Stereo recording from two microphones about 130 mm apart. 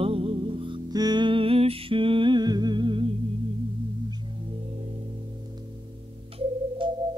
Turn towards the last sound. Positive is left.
turn(degrees=-40)  # may be behind; listen again after turning